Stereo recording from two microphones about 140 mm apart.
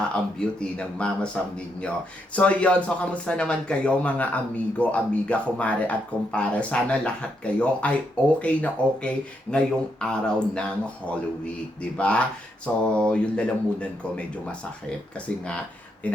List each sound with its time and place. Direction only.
0.3 s speech: 5° left (ahead or behind)